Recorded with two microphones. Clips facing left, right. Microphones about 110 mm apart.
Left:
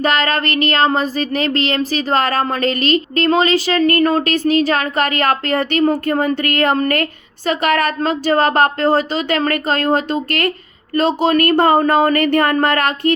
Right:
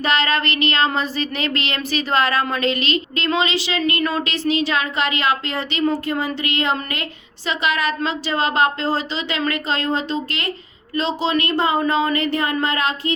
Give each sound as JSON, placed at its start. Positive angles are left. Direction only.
{"t": 0.0, "sound": "speech", "side_deg": 45}